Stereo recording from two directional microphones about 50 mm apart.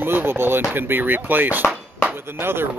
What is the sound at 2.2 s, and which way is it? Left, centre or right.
Speech, right.